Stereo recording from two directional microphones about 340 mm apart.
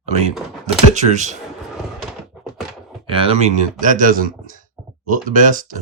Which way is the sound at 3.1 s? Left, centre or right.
Centre.